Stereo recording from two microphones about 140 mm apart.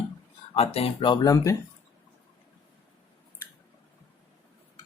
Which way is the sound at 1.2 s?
25° left (ahead or behind).